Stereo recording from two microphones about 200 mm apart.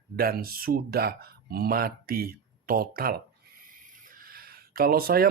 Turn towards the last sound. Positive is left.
turn(degrees=-50)  # may be behind; listen again after turning